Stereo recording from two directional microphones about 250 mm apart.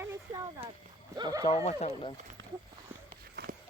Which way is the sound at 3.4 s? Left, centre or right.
Right.